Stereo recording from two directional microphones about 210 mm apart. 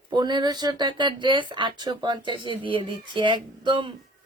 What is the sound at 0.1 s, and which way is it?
Speech, 20° right (ahead or behind).